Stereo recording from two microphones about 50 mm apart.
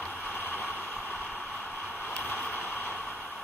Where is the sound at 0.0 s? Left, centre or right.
Left.